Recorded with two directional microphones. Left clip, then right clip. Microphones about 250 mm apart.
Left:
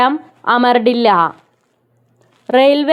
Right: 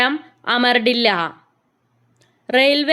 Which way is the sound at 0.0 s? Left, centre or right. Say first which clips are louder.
Left 5 dB; centre.